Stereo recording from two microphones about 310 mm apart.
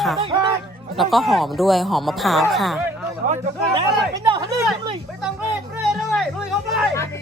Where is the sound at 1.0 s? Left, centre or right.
Centre.